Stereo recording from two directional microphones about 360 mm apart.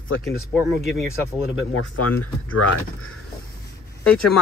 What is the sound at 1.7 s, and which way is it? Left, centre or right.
Speech, left.